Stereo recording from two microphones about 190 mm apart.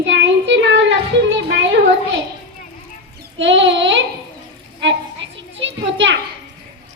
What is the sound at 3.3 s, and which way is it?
Child singing, 75° right (ahead or behind).